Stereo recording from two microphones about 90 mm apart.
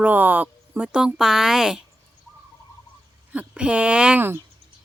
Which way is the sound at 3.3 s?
10° right (ahead or behind).